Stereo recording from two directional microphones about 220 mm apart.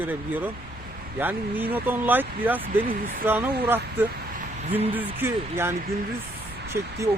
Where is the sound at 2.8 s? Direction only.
40° right (ahead or behind).